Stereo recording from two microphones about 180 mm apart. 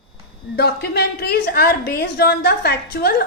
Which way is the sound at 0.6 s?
65° left (ahead or behind).